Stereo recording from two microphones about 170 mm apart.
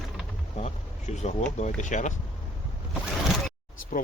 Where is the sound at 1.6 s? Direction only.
45° left (ahead or behind).